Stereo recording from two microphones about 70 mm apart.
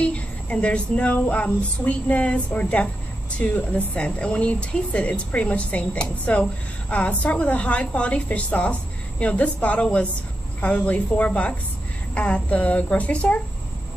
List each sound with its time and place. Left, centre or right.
0.0 s female singing: centre
3.3 s speech: centre
6.9 s female singing: centre
9.2 s speech: centre